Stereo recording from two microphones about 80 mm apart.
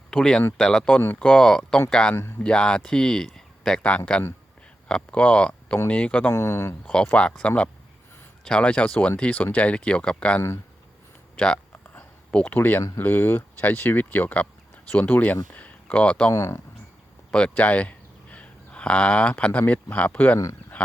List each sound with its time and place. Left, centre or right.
0.1 s speech: centre
6.3 s speech: left
6.8 s speech: centre
12.5 s speech: left
16.3 s speech: left
17.3 s speech: centre
20.7 s a sound: centre